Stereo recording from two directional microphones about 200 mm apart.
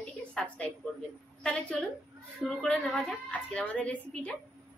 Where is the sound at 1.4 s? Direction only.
5° left (ahead or behind).